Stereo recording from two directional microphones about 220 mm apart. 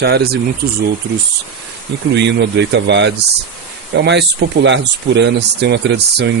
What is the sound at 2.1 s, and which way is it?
Speech, 50° right (ahead or behind).